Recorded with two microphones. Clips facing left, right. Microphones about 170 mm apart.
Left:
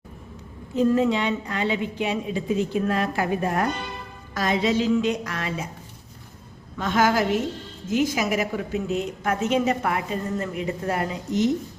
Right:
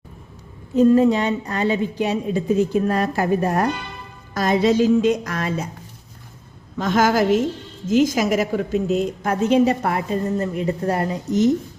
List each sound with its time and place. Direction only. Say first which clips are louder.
0.9 s a woman's voice: right 5 dB; 40° right (ahead or behind)
6.7 s a woman's voice: right 3 dB; 40° right (ahead or behind)